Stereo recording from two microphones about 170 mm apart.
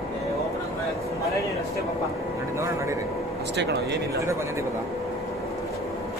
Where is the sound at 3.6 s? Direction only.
75° right (ahead or behind).